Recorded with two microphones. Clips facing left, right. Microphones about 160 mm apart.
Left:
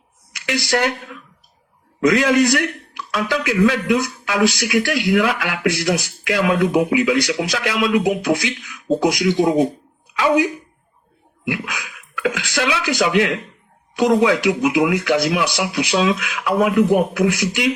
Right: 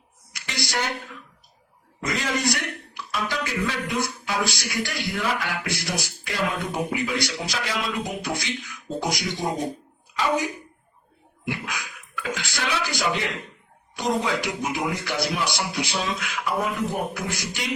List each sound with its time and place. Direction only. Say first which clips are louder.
0.4 s speech: left 9 dB; 90° left
2.0 s a man's voice: left 12 dB; 80° left
11.4 s speech: left 6 dB; 75° left (ahead or behind)
12.1 s a man's voice: left 9 dB; 90° left